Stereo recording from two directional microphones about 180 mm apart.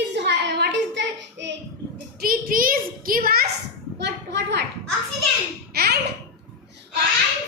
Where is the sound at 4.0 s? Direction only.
70° right (ahead or behind).